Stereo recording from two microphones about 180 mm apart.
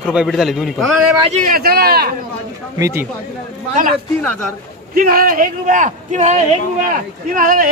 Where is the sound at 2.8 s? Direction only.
15° right (ahead or behind).